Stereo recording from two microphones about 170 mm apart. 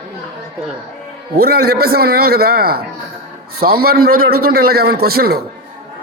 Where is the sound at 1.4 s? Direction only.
65° right (ahead or behind).